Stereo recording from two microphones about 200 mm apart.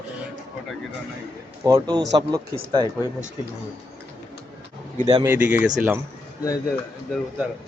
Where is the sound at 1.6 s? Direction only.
15° right (ahead or behind).